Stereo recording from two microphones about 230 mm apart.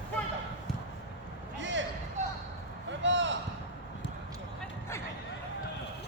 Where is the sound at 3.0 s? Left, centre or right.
Right.